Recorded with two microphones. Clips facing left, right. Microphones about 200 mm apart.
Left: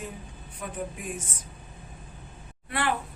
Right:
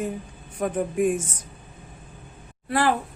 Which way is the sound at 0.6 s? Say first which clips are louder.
Right 12 dB; 50° right (ahead or behind).